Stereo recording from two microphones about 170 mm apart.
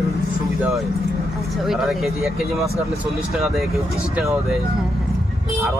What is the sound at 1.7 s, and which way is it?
Speech, centre (ahead or behind).